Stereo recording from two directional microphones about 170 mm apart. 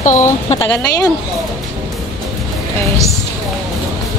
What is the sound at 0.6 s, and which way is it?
Speech, 20° left (ahead or behind).